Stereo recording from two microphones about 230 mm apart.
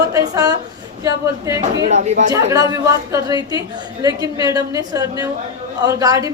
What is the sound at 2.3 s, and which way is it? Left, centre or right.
A woman's voice, centre.